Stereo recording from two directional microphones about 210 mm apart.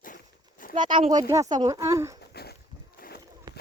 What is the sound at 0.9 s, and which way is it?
Speech, 20° right (ahead or behind).